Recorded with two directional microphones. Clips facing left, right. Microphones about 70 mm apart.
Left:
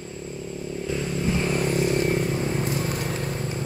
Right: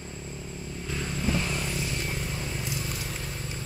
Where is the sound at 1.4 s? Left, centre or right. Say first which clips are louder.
Left 9 dB; left.